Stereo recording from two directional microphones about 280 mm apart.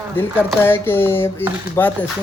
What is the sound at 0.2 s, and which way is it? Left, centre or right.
Speech, centre.